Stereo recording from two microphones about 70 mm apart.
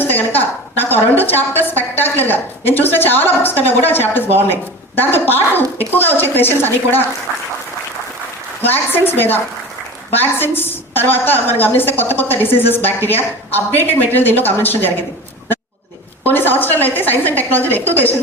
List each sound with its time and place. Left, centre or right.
0.0 s a woman's voice: left
8.6 s a woman's voice: left
16.2 s a woman's voice: left